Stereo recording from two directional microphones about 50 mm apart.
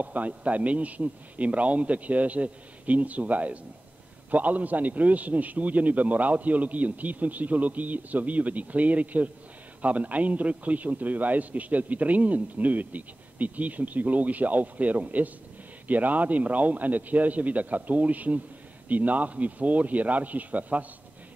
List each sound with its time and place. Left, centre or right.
0.0 s a man's voice: right